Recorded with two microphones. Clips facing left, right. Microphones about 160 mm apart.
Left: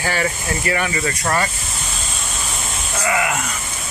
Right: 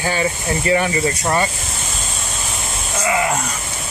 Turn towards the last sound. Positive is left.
turn(degrees=-25)  # may be behind; listen again after turning